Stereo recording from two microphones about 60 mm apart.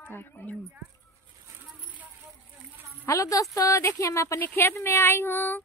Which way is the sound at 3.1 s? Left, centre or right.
Left.